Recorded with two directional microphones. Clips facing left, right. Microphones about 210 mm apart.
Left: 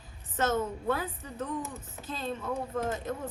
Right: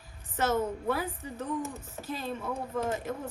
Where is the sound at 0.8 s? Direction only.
10° right (ahead or behind).